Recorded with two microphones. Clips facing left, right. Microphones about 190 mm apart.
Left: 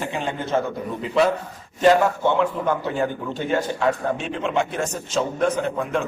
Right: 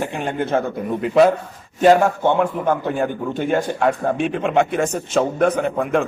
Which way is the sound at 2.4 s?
50° right (ahead or behind).